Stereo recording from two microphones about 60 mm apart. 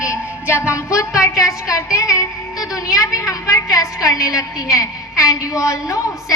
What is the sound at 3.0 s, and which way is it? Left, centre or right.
A woman's voice, left.